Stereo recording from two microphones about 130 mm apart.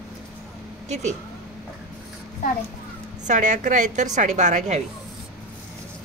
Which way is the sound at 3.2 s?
70° right (ahead or behind).